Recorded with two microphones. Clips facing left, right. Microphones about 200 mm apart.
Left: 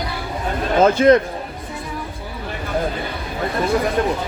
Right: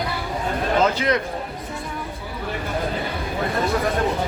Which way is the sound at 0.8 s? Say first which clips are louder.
Left 12 dB; 50° left (ahead or behind).